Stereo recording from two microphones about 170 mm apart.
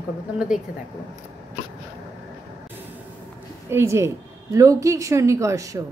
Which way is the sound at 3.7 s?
15° right (ahead or behind).